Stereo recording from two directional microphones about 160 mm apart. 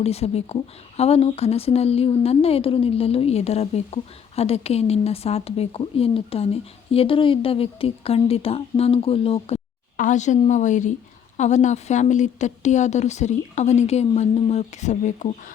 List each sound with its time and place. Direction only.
0.0 s a woman's voice: 40° left (ahead or behind)
10.0 s speech: 50° left (ahead or behind)